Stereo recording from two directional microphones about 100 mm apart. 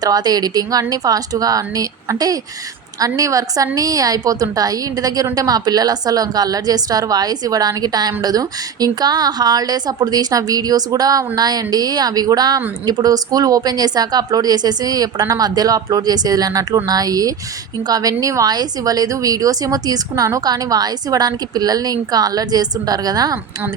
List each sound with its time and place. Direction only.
0.0 s a woman's voice: 40° right (ahead or behind)